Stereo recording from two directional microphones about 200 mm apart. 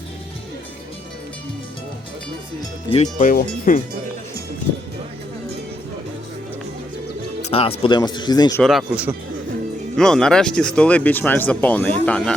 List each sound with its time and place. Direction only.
2.9 s speech: 35° left (ahead or behind)
7.4 s speech: 30° left (ahead or behind)
8.6 s speech: 5° right (ahead or behind)